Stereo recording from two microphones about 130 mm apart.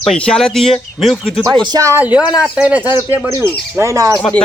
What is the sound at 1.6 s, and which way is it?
Speech, 25° right (ahead or behind).